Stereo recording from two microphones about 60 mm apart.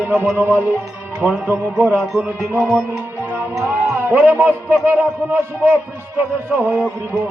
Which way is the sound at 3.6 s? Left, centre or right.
Right.